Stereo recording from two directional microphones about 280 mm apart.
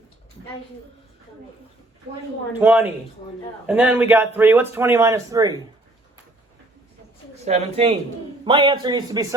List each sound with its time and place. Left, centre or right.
2.6 s a woman's voice: centre
7.4 s a man's voice: right